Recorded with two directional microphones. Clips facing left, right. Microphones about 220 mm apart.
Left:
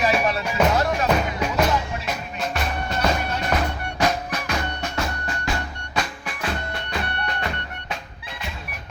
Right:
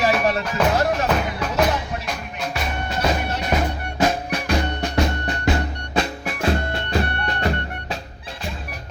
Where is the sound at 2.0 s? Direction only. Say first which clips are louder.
Even; 5° left (ahead or behind).